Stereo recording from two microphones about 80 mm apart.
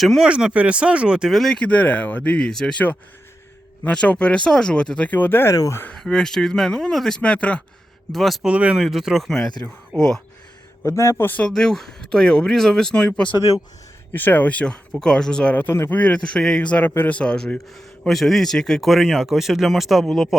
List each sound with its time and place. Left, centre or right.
0.0 s a man's voice: centre
0.3 s speech: centre
1.3 s a man's voice: centre
1.5 s speech: centre
3.8 s speech: centre
5.9 s speech: centre
8.1 s a man's voice: centre
8.4 s a man's voice: centre
10.8 s a man's voice: left
11.4 s speech: centre
14.1 s speech: left
15.5 s speech: left
16.0 s a man's voice: centre